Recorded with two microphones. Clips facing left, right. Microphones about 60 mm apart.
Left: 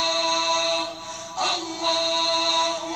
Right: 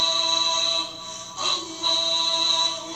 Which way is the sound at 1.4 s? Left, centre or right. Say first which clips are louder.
Left 4 dB; left.